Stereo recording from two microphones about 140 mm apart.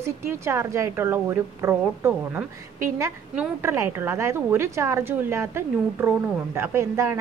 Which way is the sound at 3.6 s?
20° right (ahead or behind).